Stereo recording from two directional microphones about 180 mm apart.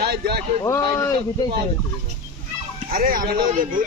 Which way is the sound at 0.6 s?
15° left (ahead or behind).